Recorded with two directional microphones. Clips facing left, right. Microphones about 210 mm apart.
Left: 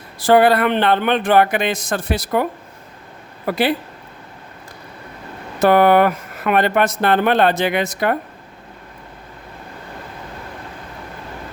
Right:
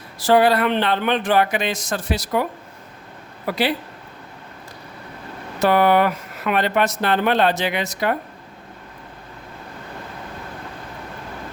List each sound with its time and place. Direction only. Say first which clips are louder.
0.2 s speech: left 3 dB; 55° left (ahead or behind)
5.5 s speech: left 4 dB; 50° left (ahead or behind)